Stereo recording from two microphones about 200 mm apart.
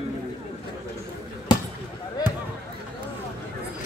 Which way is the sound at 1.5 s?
20° left (ahead or behind).